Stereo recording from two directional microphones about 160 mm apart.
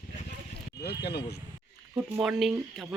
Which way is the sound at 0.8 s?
90° left.